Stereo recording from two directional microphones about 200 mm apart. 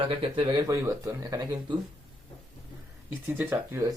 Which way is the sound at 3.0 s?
10° right (ahead or behind).